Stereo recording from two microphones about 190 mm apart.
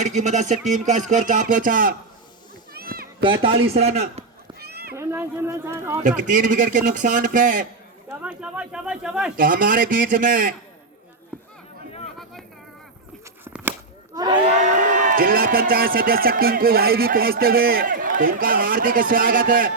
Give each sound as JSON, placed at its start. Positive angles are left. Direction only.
{"t": 0.0, "sound": "a man's voice", "side_deg": -40}
{"t": 2.7, "sound": "a sound", "side_deg": -50}
{"t": 3.4, "sound": "a man's voice", "side_deg": -30}
{"t": 4.6, "sound": "cat", "side_deg": -55}
{"t": 4.9, "sound": "speech", "side_deg": -15}
{"t": 6.0, "sound": "speech", "side_deg": -45}
{"t": 8.2, "sound": "speech", "side_deg": -5}
{"t": 9.4, "sound": "speech", "side_deg": -45}
{"t": 13.4, "sound": "a sound", "side_deg": -10}
{"t": 14.2, "sound": "crowd", "side_deg": -25}
{"t": 14.6, "sound": "speech", "side_deg": -40}